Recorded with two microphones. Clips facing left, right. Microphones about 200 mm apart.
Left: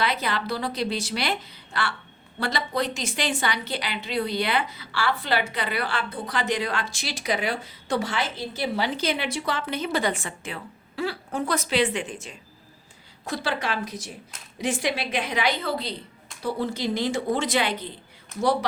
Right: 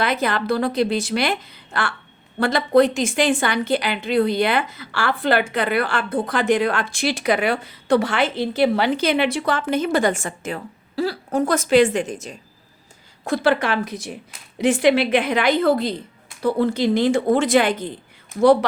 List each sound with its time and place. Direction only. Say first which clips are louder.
0.0 s a woman's voice: right 5 dB; 50° right (ahead or behind)
13.2 s speech: right 9 dB; 55° right (ahead or behind)